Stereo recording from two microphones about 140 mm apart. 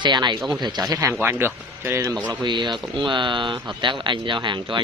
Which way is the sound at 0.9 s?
20° right (ahead or behind).